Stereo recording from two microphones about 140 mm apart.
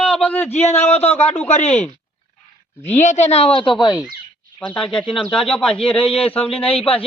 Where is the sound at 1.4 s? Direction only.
55° left (ahead or behind).